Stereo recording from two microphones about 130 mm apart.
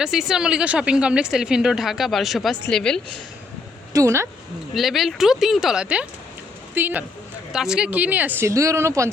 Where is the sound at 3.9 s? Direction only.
25° right (ahead or behind).